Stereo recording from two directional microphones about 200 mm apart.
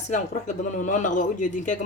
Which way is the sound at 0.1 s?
40° left (ahead or behind).